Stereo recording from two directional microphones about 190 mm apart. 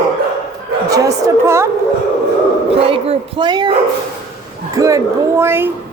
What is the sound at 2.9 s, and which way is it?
Speech, 25° right (ahead or behind).